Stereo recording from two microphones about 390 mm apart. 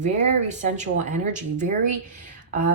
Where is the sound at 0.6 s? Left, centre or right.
Centre.